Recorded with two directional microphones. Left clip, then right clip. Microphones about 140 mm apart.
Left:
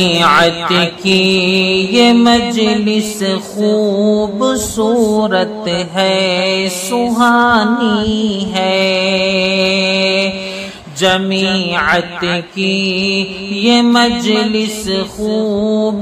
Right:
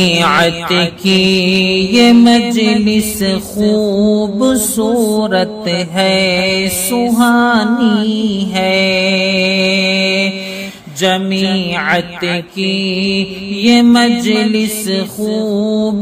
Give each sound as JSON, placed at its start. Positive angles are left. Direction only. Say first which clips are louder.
{"t": 0.0, "sound": "music", "louder": "left 1 dB", "side_deg": -45}